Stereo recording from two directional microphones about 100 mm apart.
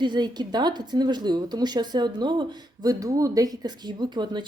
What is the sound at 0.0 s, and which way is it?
A woman's voice, 45° right (ahead or behind).